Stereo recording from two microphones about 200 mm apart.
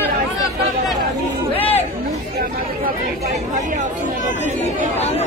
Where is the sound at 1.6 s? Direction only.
30° left (ahead or behind).